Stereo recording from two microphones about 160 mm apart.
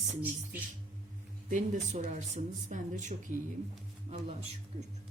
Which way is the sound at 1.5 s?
50° right (ahead or behind).